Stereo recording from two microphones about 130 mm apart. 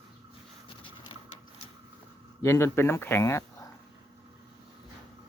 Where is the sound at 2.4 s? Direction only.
20° left (ahead or behind).